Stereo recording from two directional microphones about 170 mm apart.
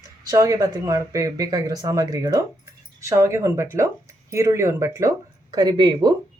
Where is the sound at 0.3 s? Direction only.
20° right (ahead or behind).